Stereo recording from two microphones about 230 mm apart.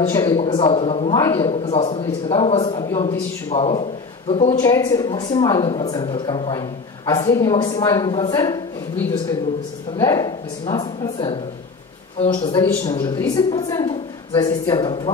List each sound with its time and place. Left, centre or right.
0.1 s a woman's voice: centre
1.1 s a man's voice: centre
3.5 s a man's voice: left
4.6 s a woman's voice: centre
12.4 s a woman's voice: centre